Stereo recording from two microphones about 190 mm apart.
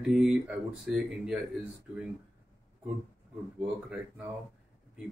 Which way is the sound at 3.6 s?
5° right (ahead or behind).